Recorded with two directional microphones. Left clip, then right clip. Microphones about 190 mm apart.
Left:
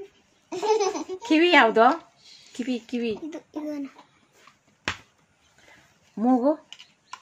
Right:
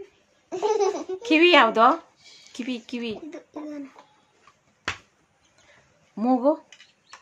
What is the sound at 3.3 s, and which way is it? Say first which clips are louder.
Speech: left 3 dB; 25° left (ahead or behind).